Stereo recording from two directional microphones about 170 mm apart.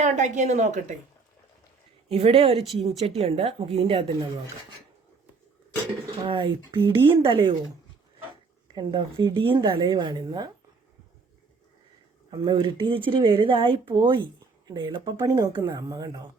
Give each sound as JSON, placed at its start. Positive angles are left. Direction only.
{"t": 0.0, "sound": "a woman's voice", "side_deg": -45}
{"t": 2.0, "sound": "speech", "side_deg": -35}
{"t": 2.7, "sound": "a woman's voice", "side_deg": 0}
{"t": 3.2, "sound": "speech", "side_deg": -35}
{"t": 6.2, "sound": "speech", "side_deg": -30}
{"t": 8.6, "sound": "speech", "side_deg": -30}
{"t": 12.3, "sound": "speech", "side_deg": -25}